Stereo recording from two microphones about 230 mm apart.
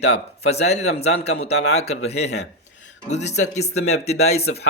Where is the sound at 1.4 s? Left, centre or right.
Left.